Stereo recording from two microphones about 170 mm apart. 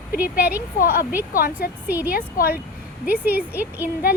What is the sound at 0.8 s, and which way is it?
A woman's voice, 60° left (ahead or behind).